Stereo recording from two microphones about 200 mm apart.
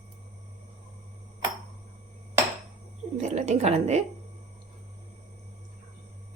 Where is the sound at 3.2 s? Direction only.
35° right (ahead or behind).